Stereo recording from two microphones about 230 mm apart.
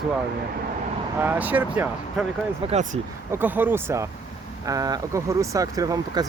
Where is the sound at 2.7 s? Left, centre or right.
Right.